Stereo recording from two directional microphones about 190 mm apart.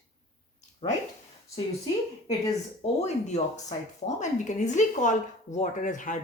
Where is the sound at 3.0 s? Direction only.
35° left (ahead or behind).